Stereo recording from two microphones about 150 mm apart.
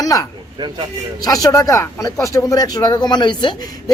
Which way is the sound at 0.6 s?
30° right (ahead or behind).